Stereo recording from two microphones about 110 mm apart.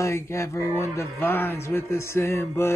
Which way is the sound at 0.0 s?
25° left (ahead or behind).